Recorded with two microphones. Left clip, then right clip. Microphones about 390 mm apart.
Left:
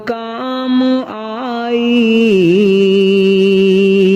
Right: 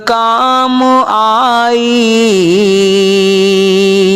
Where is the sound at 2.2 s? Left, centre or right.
Right.